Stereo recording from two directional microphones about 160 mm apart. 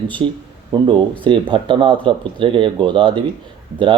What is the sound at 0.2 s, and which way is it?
Speech, 25° right (ahead or behind).